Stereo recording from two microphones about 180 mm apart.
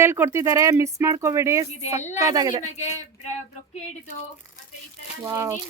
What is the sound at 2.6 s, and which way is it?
Speech, 40° left (ahead or behind).